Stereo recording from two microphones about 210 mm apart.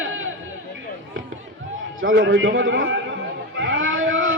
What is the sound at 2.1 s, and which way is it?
A man's voice, 50° right (ahead or behind).